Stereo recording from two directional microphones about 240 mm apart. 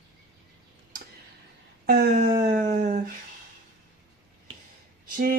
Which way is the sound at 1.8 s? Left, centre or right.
Right.